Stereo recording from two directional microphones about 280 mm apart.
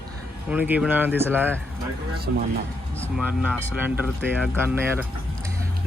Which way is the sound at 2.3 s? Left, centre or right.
Right.